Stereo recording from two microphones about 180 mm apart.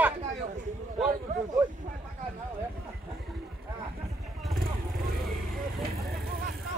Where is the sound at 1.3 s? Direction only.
40° right (ahead or behind).